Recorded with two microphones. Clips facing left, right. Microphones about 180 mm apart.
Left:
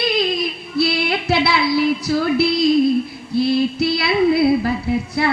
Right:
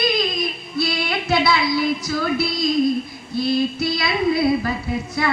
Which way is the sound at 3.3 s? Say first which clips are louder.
Left 3 dB; 70° left (ahead or behind).